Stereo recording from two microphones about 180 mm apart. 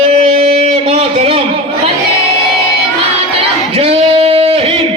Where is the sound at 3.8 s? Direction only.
30° right (ahead or behind).